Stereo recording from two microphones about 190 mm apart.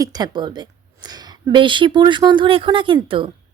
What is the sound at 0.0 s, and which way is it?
A woman's voice, 20° right (ahead or behind).